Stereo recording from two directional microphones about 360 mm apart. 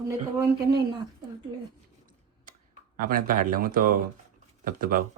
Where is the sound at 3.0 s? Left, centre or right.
Right.